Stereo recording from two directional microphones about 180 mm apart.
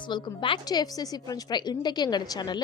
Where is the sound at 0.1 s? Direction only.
25° left (ahead or behind).